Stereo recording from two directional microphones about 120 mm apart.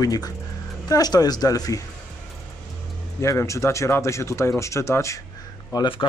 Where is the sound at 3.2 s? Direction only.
25° left (ahead or behind).